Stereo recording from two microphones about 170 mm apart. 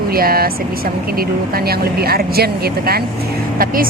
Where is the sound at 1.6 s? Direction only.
65° right (ahead or behind).